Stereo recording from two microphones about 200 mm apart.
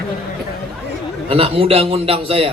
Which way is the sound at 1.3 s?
30° right (ahead or behind).